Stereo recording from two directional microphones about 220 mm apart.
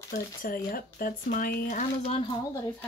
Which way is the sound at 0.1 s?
40° left (ahead or behind).